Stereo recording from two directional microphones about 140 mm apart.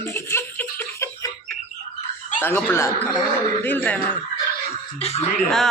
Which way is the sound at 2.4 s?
15° left (ahead or behind).